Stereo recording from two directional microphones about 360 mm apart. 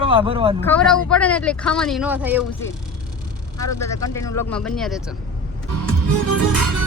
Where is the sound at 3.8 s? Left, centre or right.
Centre.